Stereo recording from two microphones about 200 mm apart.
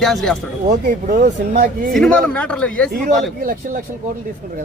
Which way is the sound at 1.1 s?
35° right (ahead or behind).